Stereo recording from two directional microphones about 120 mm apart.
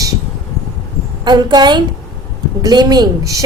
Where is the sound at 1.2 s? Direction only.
40° right (ahead or behind).